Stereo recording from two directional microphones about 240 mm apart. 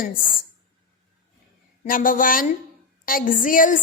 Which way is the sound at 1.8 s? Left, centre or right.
Left.